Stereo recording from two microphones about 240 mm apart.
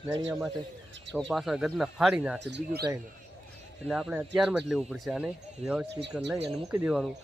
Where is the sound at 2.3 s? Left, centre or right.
Right.